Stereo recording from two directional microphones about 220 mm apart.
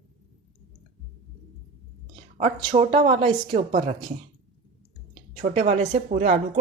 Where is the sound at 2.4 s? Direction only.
30° right (ahead or behind).